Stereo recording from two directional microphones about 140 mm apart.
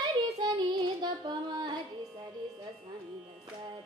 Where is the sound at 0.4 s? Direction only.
30° right (ahead or behind).